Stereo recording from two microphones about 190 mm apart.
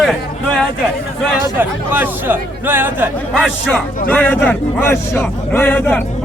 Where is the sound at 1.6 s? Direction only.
10° right (ahead or behind).